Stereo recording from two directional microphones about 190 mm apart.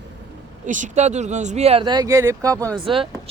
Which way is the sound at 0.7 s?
40° right (ahead or behind).